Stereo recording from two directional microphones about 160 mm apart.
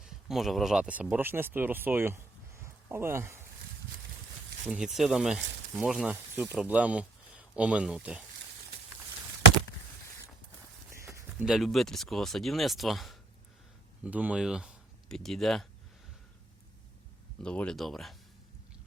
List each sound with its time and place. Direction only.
0.0 s speech: centre (ahead or behind)
2.6 s a sound: 15° right (ahead or behind)
4.6 s speech: 5° right (ahead or behind)
11.0 s speech: 20° right (ahead or behind); by 15.6 s centre (ahead or behind)
17.4 s speech: 5° left (ahead or behind)